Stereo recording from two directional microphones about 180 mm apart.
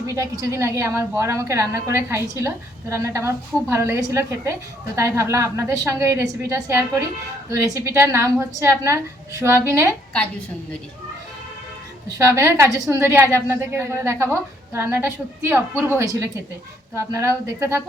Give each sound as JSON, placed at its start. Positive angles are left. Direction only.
{"t": 0.1, "sound": "a woman's voice", "side_deg": -15}
{"t": 12.1, "sound": "a woman's voice", "side_deg": -15}